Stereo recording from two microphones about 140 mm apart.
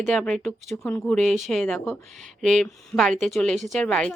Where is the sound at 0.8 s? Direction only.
15° left (ahead or behind).